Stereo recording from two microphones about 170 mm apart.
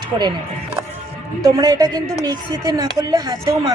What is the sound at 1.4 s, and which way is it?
A woman's voice, 20° right (ahead or behind).